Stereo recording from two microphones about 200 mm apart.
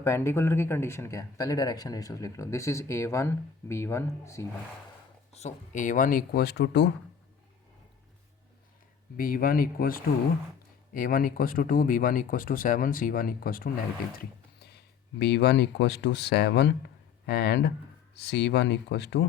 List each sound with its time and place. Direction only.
0.0 s speech: 15° left (ahead or behind)
5.3 s speech: 35° left (ahead or behind); by 6.9 s 60° left (ahead or behind)
9.1 s speech: 45° left (ahead or behind)
15.2 s speech: 55° left (ahead or behind)